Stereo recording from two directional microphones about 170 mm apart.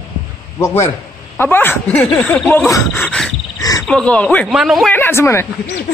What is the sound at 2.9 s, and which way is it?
Wild animals, centre (ahead or behind).